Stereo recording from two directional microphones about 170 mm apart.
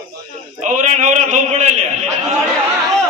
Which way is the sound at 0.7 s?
45° right (ahead or behind).